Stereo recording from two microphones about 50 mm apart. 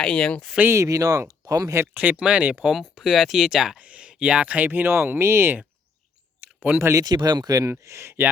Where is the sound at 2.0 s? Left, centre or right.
Right.